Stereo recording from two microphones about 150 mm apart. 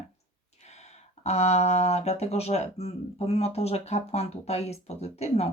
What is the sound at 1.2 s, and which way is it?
Speech, 45° left (ahead or behind).